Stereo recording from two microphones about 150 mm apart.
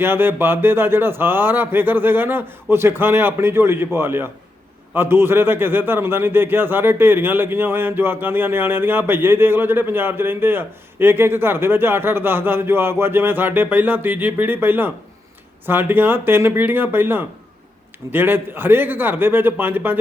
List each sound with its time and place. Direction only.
0.0 s a man's voice: 15° right (ahead or behind)